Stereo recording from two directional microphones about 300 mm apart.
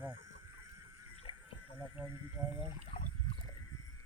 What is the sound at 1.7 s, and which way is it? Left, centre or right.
Speech, centre.